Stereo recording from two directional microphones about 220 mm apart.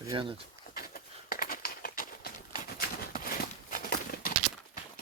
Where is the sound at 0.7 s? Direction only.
40° left (ahead or behind).